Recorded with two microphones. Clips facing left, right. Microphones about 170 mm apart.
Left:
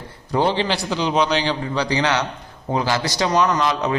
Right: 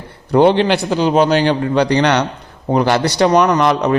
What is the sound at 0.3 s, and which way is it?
A man's voice, 60° right (ahead or behind).